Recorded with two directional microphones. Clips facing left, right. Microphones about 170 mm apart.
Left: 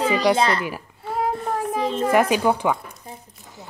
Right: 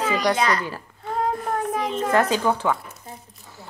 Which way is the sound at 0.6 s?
10° left (ahead or behind).